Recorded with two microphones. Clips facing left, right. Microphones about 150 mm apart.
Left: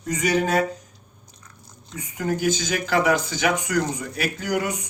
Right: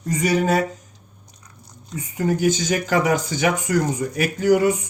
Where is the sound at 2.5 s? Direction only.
40° right (ahead or behind).